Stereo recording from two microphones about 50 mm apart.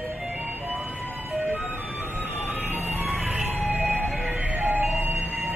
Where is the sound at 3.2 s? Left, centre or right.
Right.